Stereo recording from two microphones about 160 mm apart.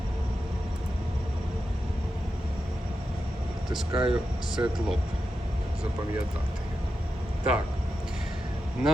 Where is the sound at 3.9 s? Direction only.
30° right (ahead or behind).